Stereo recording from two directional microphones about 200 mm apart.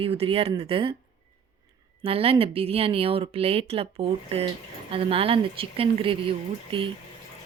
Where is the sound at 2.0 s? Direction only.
30° right (ahead or behind).